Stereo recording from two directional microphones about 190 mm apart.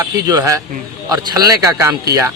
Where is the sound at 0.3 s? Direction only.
20° right (ahead or behind).